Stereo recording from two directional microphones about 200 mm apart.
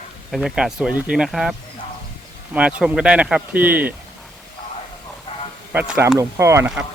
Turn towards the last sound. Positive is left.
turn(degrees=-10)  # may be behind; listen again after turning